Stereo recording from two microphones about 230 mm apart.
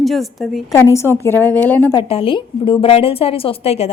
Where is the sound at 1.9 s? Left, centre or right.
Left.